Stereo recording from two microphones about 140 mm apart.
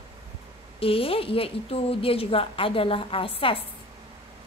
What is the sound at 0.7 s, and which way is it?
A woman's voice, 40° left (ahead or behind).